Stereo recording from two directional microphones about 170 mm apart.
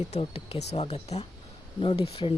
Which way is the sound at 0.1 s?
35° left (ahead or behind).